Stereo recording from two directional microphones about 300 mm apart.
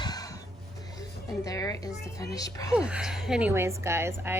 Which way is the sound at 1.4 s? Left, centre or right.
Centre.